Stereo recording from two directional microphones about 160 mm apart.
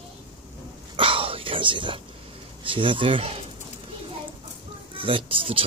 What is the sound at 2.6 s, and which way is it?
Speech, 35° right (ahead or behind).